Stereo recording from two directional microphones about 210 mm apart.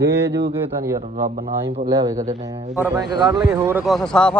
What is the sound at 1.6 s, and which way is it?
A man's voice, 20° right (ahead or behind).